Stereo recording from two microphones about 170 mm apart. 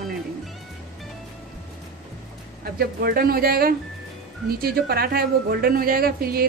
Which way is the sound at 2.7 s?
60° right (ahead or behind).